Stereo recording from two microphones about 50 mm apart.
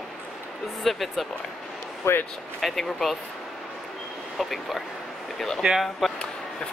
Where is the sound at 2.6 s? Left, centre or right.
Centre.